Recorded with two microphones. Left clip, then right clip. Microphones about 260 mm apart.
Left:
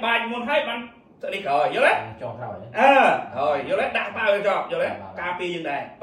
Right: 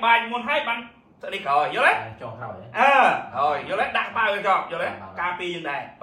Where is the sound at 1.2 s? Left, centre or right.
Centre.